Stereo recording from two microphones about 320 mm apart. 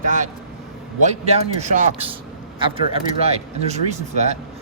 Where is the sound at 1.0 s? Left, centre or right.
Centre.